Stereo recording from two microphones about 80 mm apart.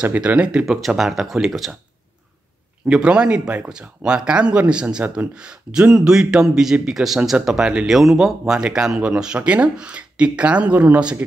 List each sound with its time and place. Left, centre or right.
0.0 s speech: centre
2.9 s speech: centre